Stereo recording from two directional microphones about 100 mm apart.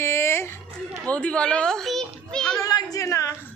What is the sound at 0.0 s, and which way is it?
Music, 25° left (ahead or behind).